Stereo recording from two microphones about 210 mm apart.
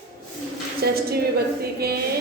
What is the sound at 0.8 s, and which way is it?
A woman's voice, 50° right (ahead or behind).